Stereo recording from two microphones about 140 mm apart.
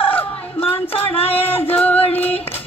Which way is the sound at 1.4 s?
15° left (ahead or behind).